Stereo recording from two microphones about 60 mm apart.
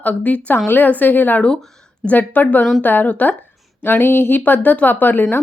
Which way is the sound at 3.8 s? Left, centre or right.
Left.